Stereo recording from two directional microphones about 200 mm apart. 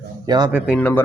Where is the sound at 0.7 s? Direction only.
5° left (ahead or behind).